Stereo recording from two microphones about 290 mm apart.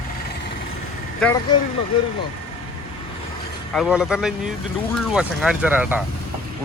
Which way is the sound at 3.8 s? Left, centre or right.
Centre.